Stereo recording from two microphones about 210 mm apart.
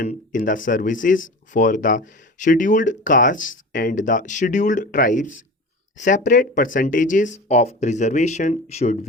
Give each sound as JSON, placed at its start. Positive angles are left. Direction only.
{"t": 0.0, "sound": "speech", "side_deg": 40}